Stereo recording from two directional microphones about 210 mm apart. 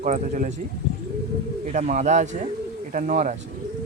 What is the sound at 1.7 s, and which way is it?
Speech, 35° right (ahead or behind).